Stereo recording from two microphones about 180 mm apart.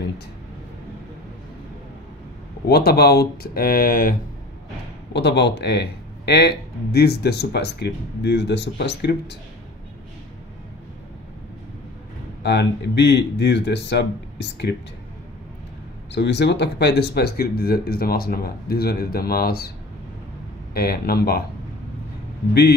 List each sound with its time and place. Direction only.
2.6 s speech: 60° left (ahead or behind)
5.1 s speech: 70° left (ahead or behind)
12.4 s speech: 70° left (ahead or behind)
16.1 s speech: 75° left (ahead or behind); by 19.7 s 55° left (ahead or behind)
20.7 s speech: 55° left (ahead or behind)
22.5 s speech: 65° left (ahead or behind)